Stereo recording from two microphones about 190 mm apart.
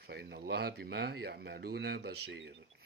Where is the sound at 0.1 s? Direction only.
55° right (ahead or behind).